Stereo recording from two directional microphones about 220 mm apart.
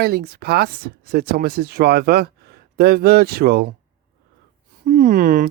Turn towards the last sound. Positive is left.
turn(degrees=-40)  # may be behind; listen again after turning